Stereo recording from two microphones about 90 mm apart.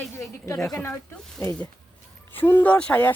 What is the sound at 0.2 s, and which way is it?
Speech, 35° left (ahead or behind).